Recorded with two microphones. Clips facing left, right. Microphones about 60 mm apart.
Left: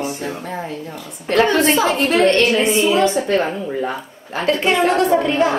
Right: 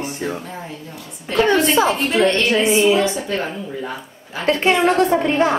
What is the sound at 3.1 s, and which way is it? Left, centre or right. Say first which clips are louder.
Speech: left 6 dB; left.